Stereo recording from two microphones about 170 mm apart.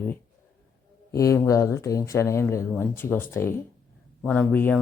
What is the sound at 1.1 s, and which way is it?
Speech, 20° left (ahead or behind).